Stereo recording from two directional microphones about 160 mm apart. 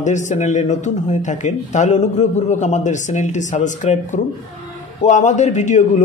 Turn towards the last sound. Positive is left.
turn(degrees=50)  # may be behind; listen again after turning